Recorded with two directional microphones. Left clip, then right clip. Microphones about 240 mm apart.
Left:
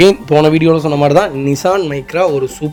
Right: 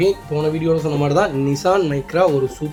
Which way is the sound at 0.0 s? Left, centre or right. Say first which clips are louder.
Left 10 dB; left.